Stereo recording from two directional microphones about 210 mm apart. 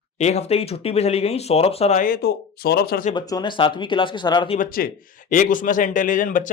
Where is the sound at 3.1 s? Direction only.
20° left (ahead or behind).